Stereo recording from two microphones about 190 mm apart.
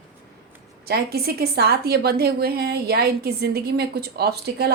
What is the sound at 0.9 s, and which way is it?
A woman's voice, 55° right (ahead or behind).